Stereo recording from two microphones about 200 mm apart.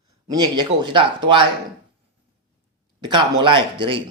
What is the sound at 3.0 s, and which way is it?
Speech, 25° right (ahead or behind).